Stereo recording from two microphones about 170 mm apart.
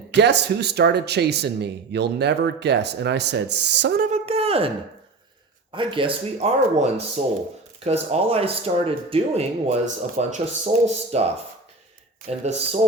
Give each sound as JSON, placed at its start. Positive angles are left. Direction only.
{"t": 0.1, "sound": "speech", "side_deg": -90}
{"t": 4.0, "sound": "a sound", "side_deg": -40}
{"t": 5.7, "sound": "speech", "side_deg": -30}
{"t": 12.3, "sound": "speech", "side_deg": -40}